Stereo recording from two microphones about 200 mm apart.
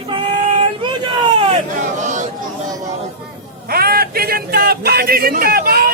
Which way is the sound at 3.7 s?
50° right (ahead or behind).